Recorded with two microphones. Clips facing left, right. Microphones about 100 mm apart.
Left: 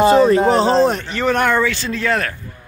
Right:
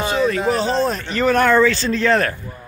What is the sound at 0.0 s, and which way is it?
Speech, 40° left (ahead or behind).